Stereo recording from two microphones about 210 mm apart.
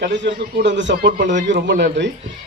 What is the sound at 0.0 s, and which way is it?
A man's voice, 60° right (ahead or behind).